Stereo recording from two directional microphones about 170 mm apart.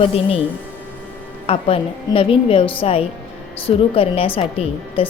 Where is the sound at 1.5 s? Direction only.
35° left (ahead or behind).